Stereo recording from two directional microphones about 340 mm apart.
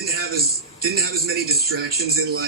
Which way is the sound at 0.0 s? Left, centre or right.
Right.